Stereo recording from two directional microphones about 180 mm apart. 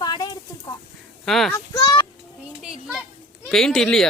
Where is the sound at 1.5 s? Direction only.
25° left (ahead or behind).